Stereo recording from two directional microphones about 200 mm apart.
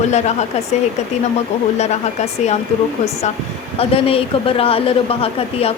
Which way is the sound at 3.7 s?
30° left (ahead or behind).